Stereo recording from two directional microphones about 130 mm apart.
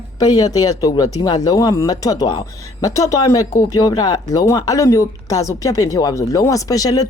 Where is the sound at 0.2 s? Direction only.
30° left (ahead or behind).